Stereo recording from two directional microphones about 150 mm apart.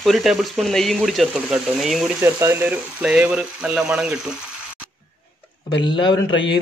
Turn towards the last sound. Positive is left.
turn(degrees=30)  # may be behind; listen again after turning